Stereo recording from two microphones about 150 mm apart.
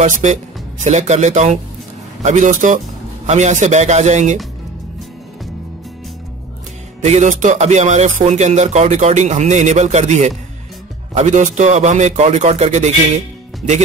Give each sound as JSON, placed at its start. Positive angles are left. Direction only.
{"t": 0.0, "sound": "speech", "side_deg": -50}
{"t": 7.1, "sound": "speech", "side_deg": -50}